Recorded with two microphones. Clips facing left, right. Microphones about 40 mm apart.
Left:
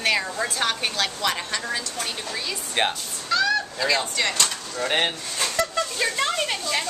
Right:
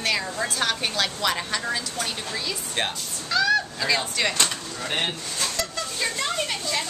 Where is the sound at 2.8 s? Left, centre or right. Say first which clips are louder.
Left 4 dB; left.